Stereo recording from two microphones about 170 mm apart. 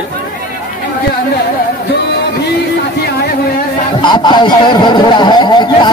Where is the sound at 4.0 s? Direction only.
25° left (ahead or behind).